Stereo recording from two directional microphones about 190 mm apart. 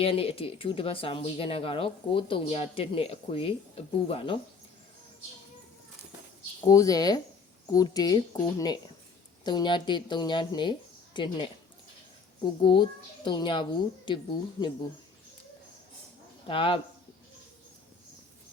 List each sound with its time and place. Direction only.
0.0 s speech: 30° left (ahead or behind)
6.7 s speech: 20° left (ahead or behind)
16.5 s speech: 30° left (ahead or behind)